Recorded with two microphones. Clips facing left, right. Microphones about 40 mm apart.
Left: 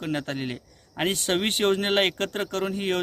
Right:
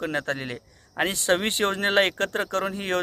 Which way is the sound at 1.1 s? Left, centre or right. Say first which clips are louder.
Right 2 dB; left.